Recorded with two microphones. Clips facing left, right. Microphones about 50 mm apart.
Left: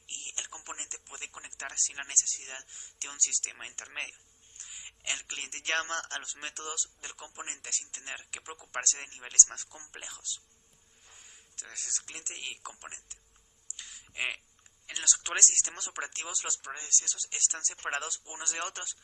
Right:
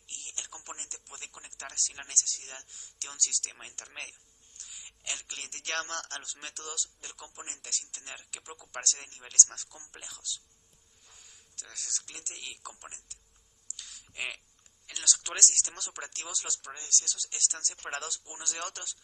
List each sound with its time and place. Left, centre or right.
0.1 s speech: left
13.7 s a sound: left
14.8 s speech: left